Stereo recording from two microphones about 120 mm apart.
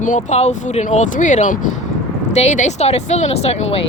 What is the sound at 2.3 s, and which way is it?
Speech, 75° left (ahead or behind).